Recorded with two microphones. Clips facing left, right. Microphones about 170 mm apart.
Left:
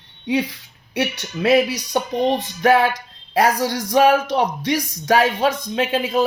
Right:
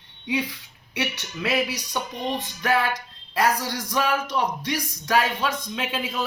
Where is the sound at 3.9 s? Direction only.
75° left (ahead or behind).